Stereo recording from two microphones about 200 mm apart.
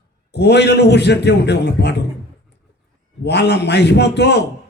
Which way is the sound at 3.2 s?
55° left (ahead or behind).